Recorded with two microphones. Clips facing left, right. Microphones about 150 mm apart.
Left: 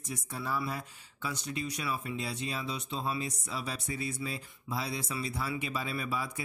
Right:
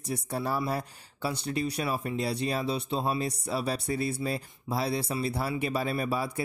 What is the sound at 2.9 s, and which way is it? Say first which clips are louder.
Speech: right 3 dB; 45° right (ahead or behind).